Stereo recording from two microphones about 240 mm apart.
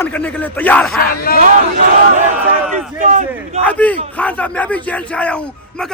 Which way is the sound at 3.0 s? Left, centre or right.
Right.